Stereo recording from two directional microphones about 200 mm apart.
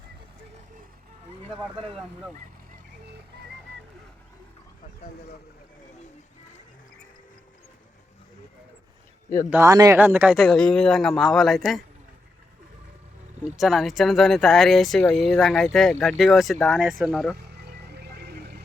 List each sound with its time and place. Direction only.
1.5 s speech: 25° right (ahead or behind)
9.5 s speech: 15° right (ahead or behind); by 11.8 s centre (ahead or behind)
13.6 s speech: centre (ahead or behind)
17.3 s vehicle: 55° right (ahead or behind)